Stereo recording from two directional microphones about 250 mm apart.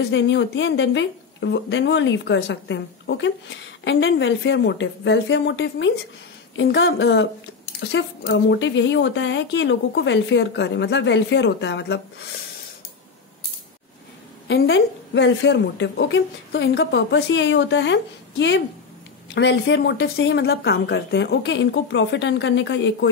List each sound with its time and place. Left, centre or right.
0.1 s a woman's voice: left
14.5 s a woman's voice: left